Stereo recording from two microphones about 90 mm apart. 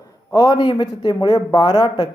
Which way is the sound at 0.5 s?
60° left (ahead or behind).